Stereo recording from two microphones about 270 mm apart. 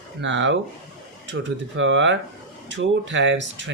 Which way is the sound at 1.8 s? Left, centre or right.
Right.